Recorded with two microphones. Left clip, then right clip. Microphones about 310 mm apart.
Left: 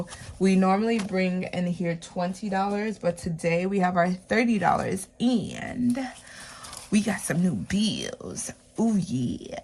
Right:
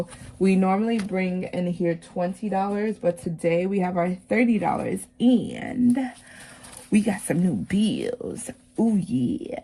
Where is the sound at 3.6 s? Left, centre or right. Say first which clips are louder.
Left 1 dB; left.